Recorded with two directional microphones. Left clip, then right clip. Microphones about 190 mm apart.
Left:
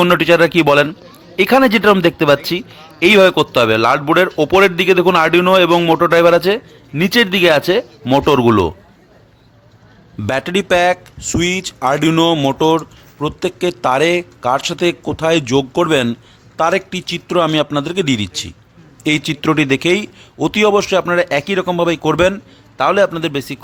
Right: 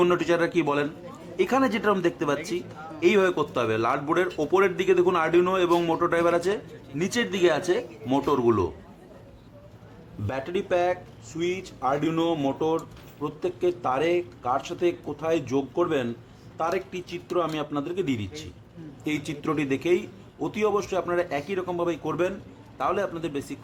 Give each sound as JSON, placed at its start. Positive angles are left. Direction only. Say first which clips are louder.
{"t": 0.0, "sound": "a man's voice", "louder": "left 12 dB", "side_deg": 50}
{"t": 10.2, "sound": "a man's voice", "louder": "left 12 dB", "side_deg": 55}